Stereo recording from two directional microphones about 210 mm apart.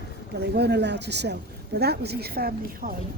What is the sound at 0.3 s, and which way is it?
Speech, 50° right (ahead or behind).